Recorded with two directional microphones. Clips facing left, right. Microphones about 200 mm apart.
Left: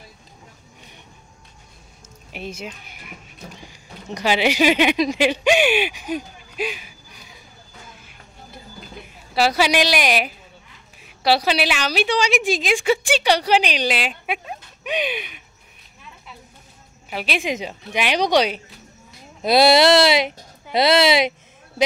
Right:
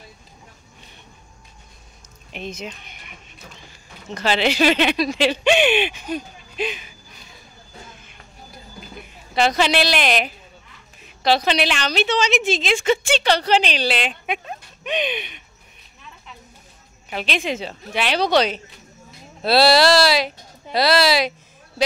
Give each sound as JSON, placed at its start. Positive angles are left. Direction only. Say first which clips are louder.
{"t": 2.3, "sound": "speech", "louder": "even", "side_deg": 10}
{"t": 9.3, "sound": "a woman's voice", "louder": "even", "side_deg": 5}
{"t": 17.1, "sound": "a woman's voice", "louder": "even", "side_deg": 10}